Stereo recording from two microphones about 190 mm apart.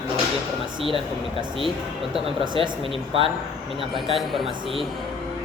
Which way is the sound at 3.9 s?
Centre (ahead or behind).